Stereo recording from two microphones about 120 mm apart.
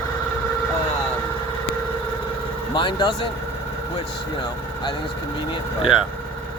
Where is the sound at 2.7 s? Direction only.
45° left (ahead or behind).